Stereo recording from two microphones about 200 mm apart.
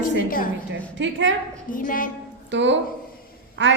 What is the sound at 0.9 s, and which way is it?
Speech, 65° right (ahead or behind).